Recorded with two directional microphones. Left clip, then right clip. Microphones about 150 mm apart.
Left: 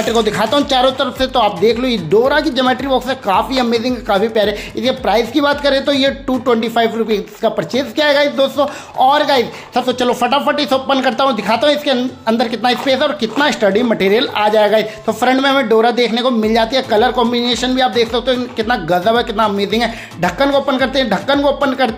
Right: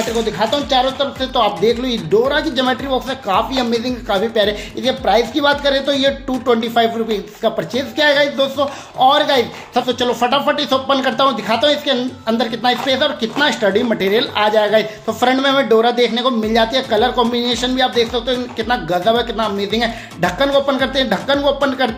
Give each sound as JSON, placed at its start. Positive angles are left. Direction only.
{"t": 0.1, "sound": "speech", "side_deg": 50}
{"t": 1.3, "sound": "speech", "side_deg": 30}